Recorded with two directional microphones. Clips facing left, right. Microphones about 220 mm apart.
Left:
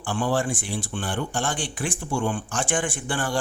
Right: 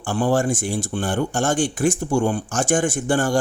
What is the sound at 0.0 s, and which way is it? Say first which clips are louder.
Speech: right 5 dB; 45° right (ahead or behind).